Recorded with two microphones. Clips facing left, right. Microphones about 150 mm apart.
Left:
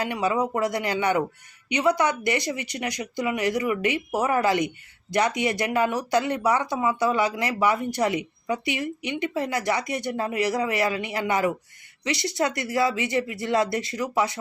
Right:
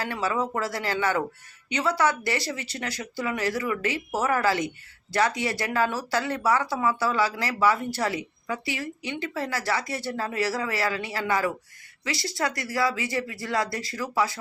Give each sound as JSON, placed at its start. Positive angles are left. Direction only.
{"t": 0.0, "sound": "speech", "side_deg": 15}